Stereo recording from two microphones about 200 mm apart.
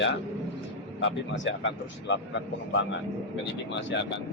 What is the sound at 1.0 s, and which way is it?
Speech, 65° left (ahead or behind).